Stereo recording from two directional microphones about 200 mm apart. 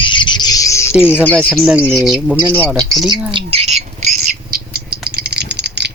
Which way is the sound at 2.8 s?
20° right (ahead or behind).